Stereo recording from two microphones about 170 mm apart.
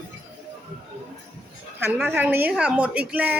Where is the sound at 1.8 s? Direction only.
10° right (ahead or behind).